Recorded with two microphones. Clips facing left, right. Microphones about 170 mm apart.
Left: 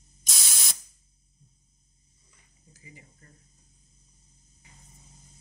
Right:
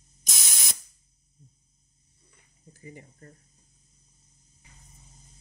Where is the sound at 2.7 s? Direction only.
50° right (ahead or behind).